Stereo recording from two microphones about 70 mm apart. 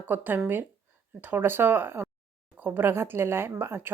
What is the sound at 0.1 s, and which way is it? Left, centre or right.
A woman's voice, right.